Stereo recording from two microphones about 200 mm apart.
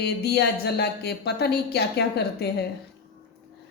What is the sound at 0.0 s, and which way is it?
Speech, 55° left (ahead or behind).